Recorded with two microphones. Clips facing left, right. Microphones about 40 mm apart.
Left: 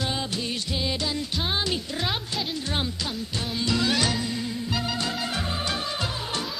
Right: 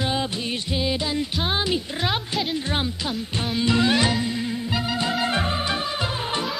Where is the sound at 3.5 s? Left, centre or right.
Right.